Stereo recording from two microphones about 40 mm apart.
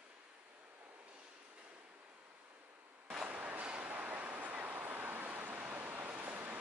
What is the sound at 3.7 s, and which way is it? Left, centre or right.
Waves, right.